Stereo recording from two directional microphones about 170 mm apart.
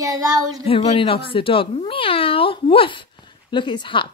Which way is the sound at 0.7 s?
30° left (ahead or behind).